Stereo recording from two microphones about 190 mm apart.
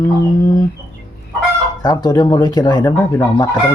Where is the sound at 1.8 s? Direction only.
20° left (ahead or behind).